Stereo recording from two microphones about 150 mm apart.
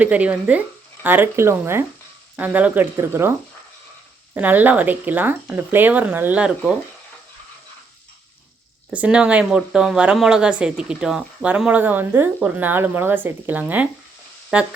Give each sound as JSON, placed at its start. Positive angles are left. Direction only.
{"t": 0.0, "sound": "speech", "side_deg": -10}
{"t": 4.4, "sound": "speech", "side_deg": -10}
{"t": 8.9, "sound": "speech", "side_deg": -10}